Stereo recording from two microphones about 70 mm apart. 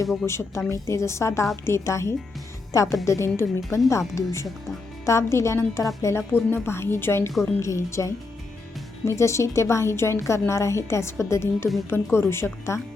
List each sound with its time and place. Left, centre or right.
0.3 s a woman's voice: left